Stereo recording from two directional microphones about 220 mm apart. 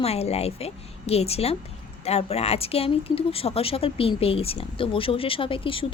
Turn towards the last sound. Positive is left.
turn(degrees=25)  # may be behind; listen again after turning